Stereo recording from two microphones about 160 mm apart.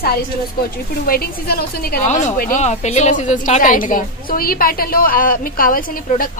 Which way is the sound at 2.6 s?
45° left (ahead or behind).